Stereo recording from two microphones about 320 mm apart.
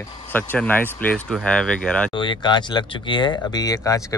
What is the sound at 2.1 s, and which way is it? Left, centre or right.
Speech, centre.